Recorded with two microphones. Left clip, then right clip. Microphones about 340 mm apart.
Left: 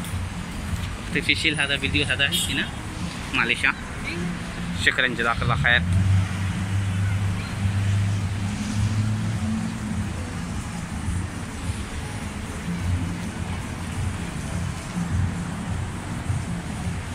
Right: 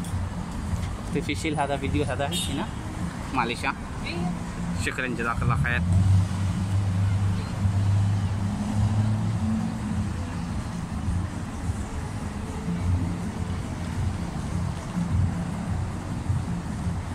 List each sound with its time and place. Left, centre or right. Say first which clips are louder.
1.1 s speech: left 7 dB; centre
2.0 s speech: left 6 dB; right
3.3 s speech: left 5 dB; centre
4.8 s speech: left 7 dB; centre